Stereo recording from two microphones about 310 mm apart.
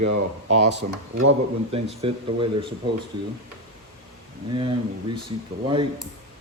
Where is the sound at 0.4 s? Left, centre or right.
Right.